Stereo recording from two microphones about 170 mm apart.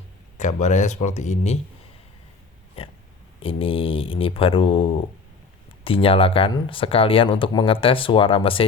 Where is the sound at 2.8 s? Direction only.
35° left (ahead or behind).